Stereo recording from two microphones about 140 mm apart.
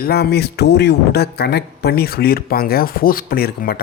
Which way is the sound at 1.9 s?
90° left.